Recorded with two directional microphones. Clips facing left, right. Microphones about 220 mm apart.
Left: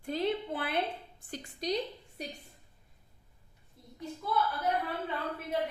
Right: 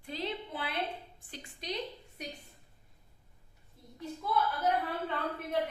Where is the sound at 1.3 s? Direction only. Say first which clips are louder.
Left 7 dB; 35° left (ahead or behind).